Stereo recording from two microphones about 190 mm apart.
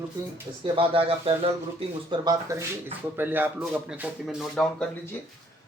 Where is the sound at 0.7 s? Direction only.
30° right (ahead or behind); by 5.2 s 5° left (ahead or behind).